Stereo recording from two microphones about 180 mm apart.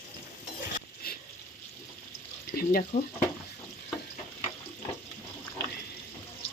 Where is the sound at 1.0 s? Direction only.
55° left (ahead or behind).